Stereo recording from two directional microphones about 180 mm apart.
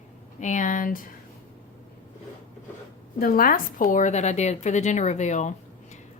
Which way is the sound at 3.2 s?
55° left (ahead or behind).